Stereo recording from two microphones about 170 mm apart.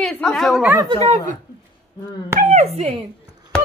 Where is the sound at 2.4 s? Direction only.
45° right (ahead or behind).